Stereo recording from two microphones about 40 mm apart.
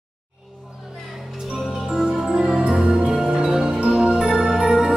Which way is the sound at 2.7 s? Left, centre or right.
Centre.